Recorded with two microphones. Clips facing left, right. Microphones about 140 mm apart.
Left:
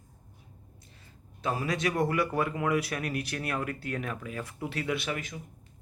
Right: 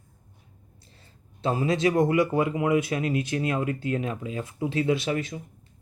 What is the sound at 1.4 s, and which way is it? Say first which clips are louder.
Speech: right 6 dB; 25° right (ahead or behind).